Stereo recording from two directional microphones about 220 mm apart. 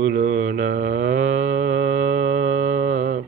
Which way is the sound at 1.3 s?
35° right (ahead or behind).